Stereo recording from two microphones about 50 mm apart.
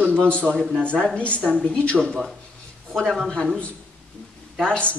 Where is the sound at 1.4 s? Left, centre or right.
Centre.